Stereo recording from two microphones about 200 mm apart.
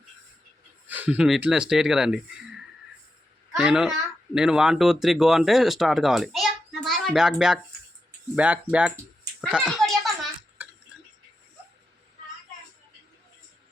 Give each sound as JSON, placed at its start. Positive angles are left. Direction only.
{"t": 0.9, "sound": "speech", "side_deg": -5}
{"t": 3.6, "sound": "speech", "side_deg": -5}
{"t": 9.4, "sound": "a sound", "side_deg": 0}
{"t": 10.6, "sound": "tick-tock", "side_deg": -10}